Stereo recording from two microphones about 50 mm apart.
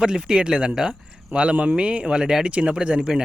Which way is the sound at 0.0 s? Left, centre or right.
Centre.